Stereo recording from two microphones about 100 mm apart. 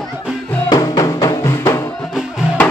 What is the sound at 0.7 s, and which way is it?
Music, 40° left (ahead or behind).